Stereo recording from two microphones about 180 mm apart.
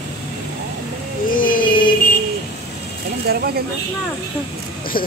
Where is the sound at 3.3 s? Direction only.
60° right (ahead or behind).